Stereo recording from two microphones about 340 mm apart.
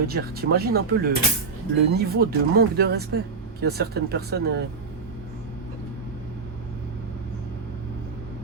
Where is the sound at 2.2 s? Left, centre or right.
Right.